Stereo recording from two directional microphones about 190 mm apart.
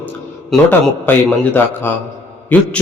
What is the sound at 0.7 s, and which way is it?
A man's voice, 10° left (ahead or behind).